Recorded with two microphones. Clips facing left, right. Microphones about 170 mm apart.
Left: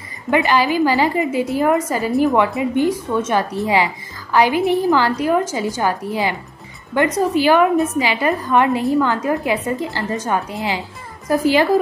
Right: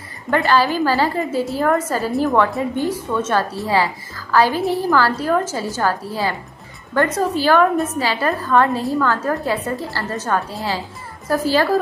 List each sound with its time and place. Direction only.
0.3 s a woman's voice: 15° left (ahead or behind)